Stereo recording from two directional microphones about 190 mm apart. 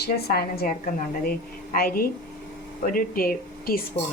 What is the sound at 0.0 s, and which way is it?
A woman's voice, 55° left (ahead or behind).